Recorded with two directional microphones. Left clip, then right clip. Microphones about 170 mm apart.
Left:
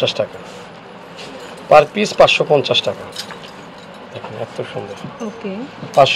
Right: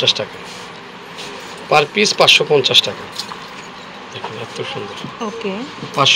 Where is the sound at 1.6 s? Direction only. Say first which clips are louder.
Left 3 dB; 50° left (ahead or behind).